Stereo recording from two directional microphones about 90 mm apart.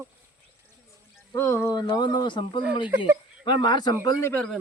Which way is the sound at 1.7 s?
50° left (ahead or behind).